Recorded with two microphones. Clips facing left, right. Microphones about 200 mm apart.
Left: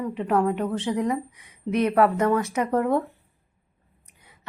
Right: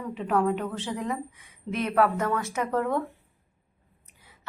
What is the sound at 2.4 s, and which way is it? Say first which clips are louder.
Speech: left 5 dB; 55° left (ahead or behind).